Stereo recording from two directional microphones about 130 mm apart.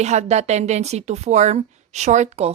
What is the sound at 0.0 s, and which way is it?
Speech, 60° right (ahead or behind).